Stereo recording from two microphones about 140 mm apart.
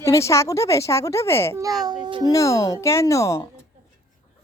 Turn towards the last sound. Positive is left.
turn(degrees=20)  # may be behind; listen again after turning